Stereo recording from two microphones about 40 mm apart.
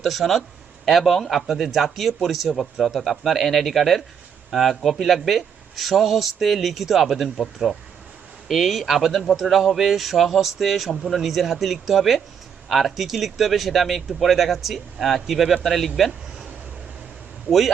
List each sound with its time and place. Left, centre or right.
0.0 s speech: centre